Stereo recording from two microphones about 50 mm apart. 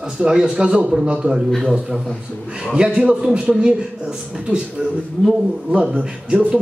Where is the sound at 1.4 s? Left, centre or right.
Centre.